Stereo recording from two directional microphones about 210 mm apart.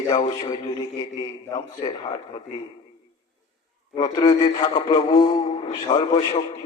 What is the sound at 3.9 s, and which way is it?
Speech, 20° left (ahead or behind).